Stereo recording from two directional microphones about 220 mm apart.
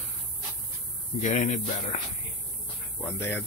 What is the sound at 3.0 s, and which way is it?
Speech, 10° left (ahead or behind).